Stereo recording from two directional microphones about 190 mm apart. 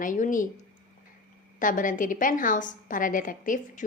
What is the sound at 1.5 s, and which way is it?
A woman's voice, 45° left (ahead or behind).